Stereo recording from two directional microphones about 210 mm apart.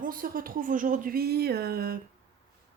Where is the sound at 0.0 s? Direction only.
40° right (ahead or behind).